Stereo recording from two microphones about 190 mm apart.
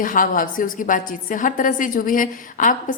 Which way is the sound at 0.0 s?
45° left (ahead or behind).